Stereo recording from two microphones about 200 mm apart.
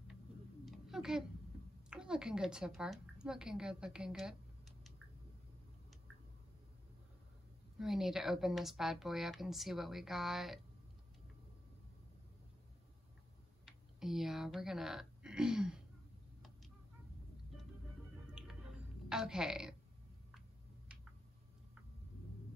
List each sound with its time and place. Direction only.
0.7 s a sound: centre (ahead or behind)
1.9 s a woman's voice: 5° right (ahead or behind)
7.8 s a woman's voice: centre (ahead or behind)
13.7 s speech: centre (ahead or behind)
18.4 s squish: 5° right (ahead or behind)
19.0 s a woman's voice: 5° right (ahead or behind)